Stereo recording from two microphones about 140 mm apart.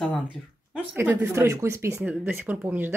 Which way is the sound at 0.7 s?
15° right (ahead or behind).